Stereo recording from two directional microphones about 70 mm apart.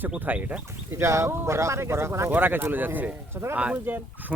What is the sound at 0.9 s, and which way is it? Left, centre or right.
Speech, right.